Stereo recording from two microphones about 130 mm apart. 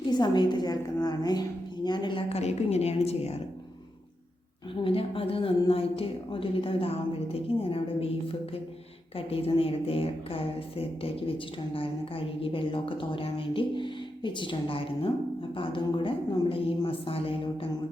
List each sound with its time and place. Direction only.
0.1 s a woman's voice: 35° left (ahead or behind)
2.3 s a woman's voice: 55° left (ahead or behind)
4.7 s a woman's voice: 45° left (ahead or behind)